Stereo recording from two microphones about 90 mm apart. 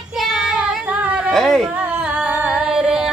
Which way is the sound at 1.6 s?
15° right (ahead or behind).